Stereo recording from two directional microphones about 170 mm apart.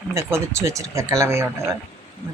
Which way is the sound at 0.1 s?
15° right (ahead or behind).